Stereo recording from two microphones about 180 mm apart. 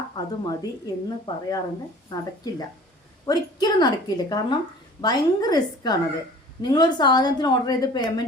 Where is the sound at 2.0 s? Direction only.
20° left (ahead or behind).